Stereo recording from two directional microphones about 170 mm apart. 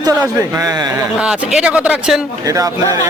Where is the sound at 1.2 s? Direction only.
5° right (ahead or behind).